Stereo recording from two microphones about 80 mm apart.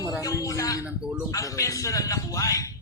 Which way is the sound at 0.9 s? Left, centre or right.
Centre.